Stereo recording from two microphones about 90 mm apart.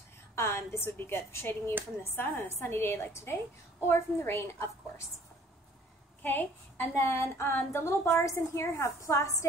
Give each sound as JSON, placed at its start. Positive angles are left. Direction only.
{"t": 0.4, "sound": "a woman's voice", "side_deg": 25}
{"t": 6.2, "sound": "a woman's voice", "side_deg": 20}